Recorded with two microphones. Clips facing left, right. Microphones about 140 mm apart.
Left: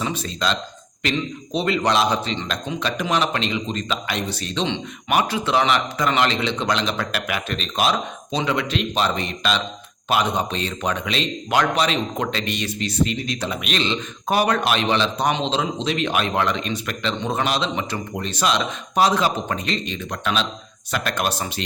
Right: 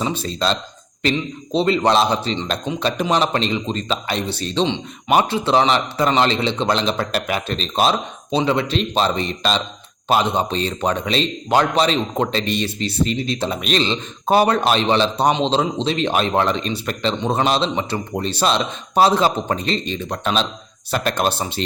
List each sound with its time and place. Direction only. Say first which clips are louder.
0.0 s speech: right 3 dB; 30° right (ahead or behind)
1.5 s speech: right 4 dB; 30° right (ahead or behind)